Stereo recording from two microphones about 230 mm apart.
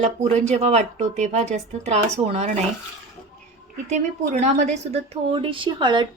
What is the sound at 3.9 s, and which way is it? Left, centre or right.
A woman's voice, right.